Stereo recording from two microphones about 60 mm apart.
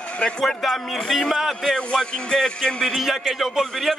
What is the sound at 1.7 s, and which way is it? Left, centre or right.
A man's voice, centre.